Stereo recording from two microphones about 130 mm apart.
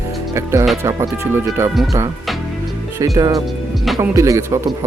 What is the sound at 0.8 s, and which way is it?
Speech, 25° right (ahead or behind).